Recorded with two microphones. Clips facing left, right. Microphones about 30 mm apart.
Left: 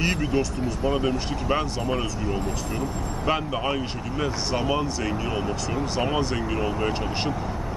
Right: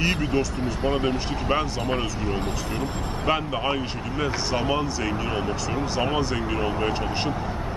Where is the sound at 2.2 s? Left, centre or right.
Right.